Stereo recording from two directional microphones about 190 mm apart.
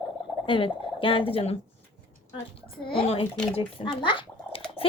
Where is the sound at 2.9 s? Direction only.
30° left (ahead or behind).